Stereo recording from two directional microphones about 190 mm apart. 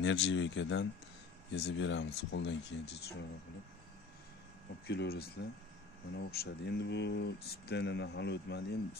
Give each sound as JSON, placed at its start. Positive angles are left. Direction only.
{"t": 0.0, "sound": "speech", "side_deg": 70}
{"t": 4.8, "sound": "speech", "side_deg": 55}